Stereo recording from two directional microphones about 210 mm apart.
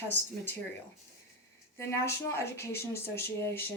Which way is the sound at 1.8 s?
10° left (ahead or behind).